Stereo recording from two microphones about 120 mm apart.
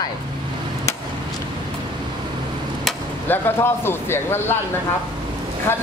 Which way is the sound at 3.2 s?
15° left (ahead or behind).